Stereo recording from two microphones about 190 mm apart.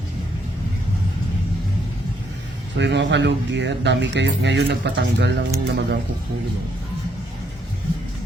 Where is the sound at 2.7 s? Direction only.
65° right (ahead or behind).